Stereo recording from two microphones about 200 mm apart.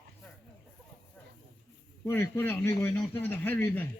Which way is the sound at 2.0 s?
15° left (ahead or behind).